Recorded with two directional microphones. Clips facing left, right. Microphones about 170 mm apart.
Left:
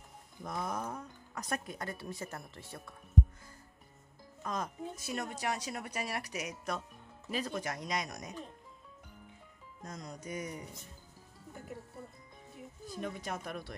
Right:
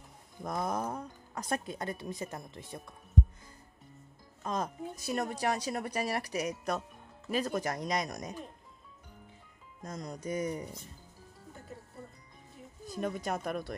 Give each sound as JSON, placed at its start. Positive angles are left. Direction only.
{"t": 0.4, "sound": "speech", "side_deg": -40}
{"t": 4.4, "sound": "speech", "side_deg": -30}
{"t": 9.8, "sound": "speech", "side_deg": -35}
{"t": 12.9, "sound": "speech", "side_deg": -45}